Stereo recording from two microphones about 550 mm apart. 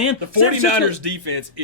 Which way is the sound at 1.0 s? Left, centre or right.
Right.